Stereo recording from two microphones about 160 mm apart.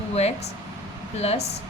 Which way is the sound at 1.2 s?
40° left (ahead or behind).